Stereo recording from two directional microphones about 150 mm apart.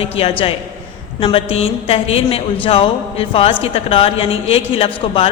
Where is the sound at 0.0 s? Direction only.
40° left (ahead or behind).